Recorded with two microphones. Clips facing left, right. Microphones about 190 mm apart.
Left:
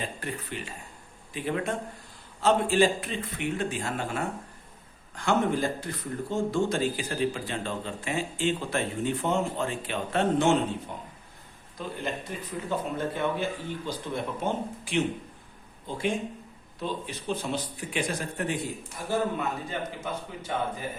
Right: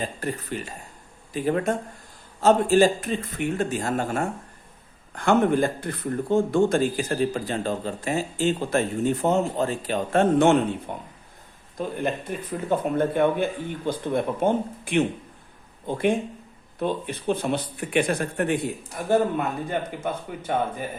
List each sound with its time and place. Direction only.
0.2 s speech: 40° right (ahead or behind)